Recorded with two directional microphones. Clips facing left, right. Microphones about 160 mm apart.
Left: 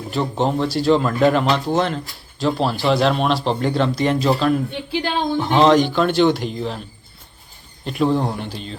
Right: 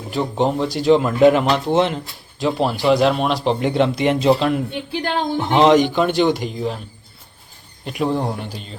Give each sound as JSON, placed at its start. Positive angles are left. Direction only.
{"t": 0.1, "sound": "speech", "side_deg": -15}
{"t": 7.9, "sound": "speech", "side_deg": -10}